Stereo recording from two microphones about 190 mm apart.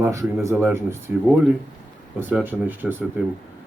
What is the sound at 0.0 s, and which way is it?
Speech, 15° right (ahead or behind).